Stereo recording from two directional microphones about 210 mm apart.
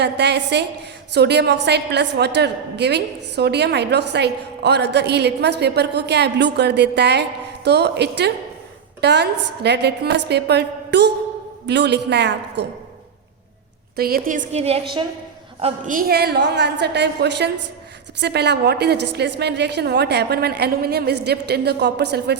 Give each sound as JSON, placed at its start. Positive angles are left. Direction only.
{"t": 0.0, "sound": "a woman's voice", "side_deg": -55}
{"t": 13.9, "sound": "a woman's voice", "side_deg": -45}
{"t": 15.6, "sound": "a woman's voice", "side_deg": -40}